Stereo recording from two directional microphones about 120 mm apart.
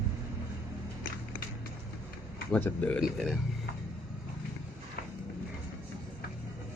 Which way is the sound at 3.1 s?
5° right (ahead or behind).